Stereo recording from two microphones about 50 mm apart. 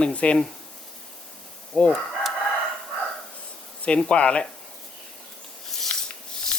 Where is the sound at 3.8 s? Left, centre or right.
Left.